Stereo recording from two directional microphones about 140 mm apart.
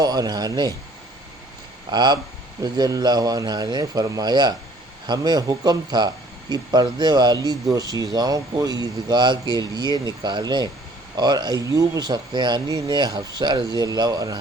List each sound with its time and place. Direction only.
0.0 s speech: 30° right (ahead or behind)
1.9 s speech: 30° right (ahead or behind)